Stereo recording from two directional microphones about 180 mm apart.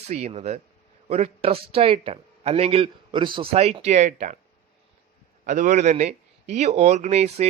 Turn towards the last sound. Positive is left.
turn(degrees=-35)  # may be behind; listen again after turning